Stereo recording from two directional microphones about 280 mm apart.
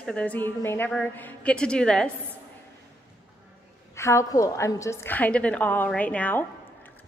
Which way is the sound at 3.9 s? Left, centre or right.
Centre.